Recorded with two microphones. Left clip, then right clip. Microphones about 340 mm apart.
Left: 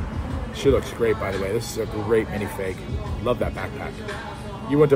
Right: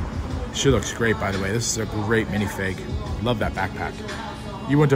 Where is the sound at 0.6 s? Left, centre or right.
Right.